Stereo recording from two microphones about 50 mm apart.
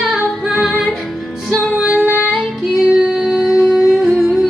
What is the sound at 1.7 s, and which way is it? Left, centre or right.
Music, right.